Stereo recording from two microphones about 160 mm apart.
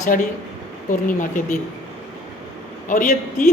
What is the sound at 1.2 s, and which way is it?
Speech, 55° left (ahead or behind).